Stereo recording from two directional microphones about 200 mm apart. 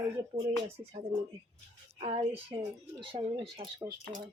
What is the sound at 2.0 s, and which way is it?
Speech, 30° right (ahead or behind).